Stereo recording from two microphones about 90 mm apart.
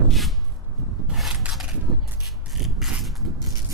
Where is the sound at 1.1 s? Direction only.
Centre (ahead or behind).